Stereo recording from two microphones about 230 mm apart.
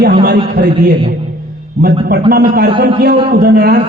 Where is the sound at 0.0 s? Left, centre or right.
Right.